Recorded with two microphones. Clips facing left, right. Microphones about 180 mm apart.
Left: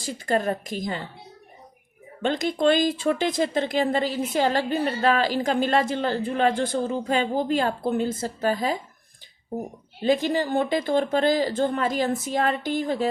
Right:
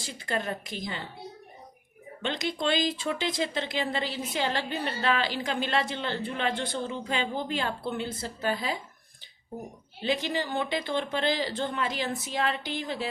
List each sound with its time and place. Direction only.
0.0 s speech: 45° left (ahead or behind)
2.2 s speech: 45° left (ahead or behind)
10.0 s speech: 45° left (ahead or behind)